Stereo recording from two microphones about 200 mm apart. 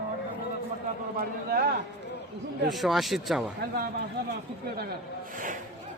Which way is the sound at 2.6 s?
Centre (ahead or behind).